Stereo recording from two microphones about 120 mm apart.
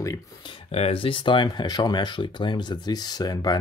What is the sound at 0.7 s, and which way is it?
Speech, 55° left (ahead or behind).